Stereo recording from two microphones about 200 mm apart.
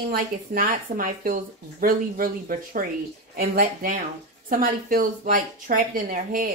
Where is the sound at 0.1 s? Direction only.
45° right (ahead or behind).